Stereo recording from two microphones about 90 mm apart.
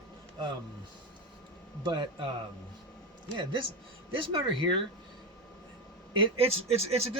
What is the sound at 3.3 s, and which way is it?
Speech, 65° right (ahead or behind).